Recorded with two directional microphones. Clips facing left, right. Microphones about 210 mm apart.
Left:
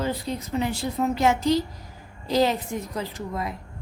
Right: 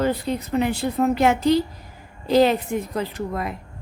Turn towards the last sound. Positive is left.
turn(degrees=-60)  # may be behind; listen again after turning